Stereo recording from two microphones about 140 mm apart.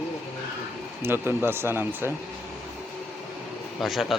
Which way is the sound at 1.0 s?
15° right (ahead or behind).